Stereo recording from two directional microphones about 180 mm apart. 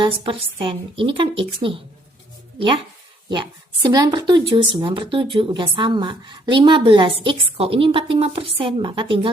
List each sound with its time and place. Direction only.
0.0 s a woman's voice: 25° right (ahead or behind)